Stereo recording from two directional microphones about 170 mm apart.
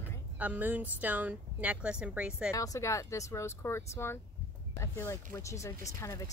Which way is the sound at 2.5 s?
20° left (ahead or behind).